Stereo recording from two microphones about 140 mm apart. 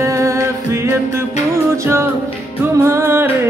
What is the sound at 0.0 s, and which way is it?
Music, 20° right (ahead or behind).